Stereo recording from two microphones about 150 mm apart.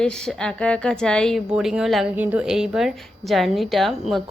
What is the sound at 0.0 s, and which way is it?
A woman's voice, 5° left (ahead or behind).